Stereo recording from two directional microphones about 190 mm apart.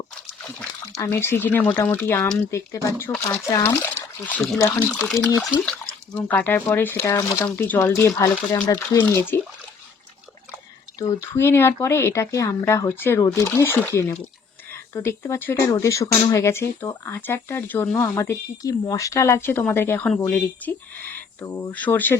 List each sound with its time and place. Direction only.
1.0 s speech: 15° left (ahead or behind)
9.0 s speech: 10° left (ahead or behind)
11.0 s speech: 15° left (ahead or behind)